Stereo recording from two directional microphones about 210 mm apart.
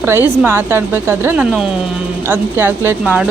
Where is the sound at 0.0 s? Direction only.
10° right (ahead or behind).